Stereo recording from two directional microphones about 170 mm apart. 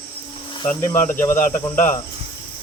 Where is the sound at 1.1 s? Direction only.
15° left (ahead or behind).